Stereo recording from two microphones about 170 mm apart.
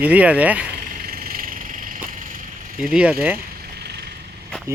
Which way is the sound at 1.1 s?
60° right (ahead or behind).